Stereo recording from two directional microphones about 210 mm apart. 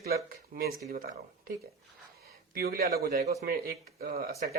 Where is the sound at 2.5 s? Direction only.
45° right (ahead or behind).